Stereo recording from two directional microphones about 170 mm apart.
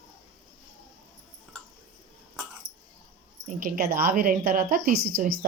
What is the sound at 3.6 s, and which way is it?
A woman's voice, 55° right (ahead or behind).